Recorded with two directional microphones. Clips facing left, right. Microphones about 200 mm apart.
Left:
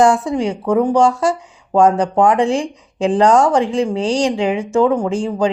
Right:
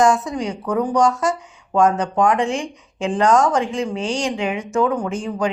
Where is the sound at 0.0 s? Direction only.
30° left (ahead or behind).